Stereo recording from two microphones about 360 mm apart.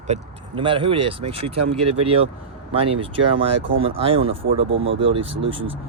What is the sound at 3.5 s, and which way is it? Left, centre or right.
Speech, right.